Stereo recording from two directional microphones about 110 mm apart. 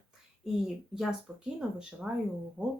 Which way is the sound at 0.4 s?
5° right (ahead or behind).